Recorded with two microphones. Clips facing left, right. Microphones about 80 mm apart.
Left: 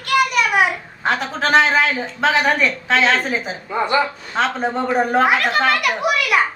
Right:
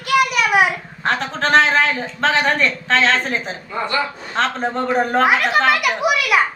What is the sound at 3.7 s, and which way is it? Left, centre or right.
Speech, centre.